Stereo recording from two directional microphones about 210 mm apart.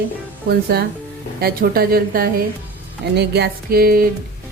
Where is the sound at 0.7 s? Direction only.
50° right (ahead or behind).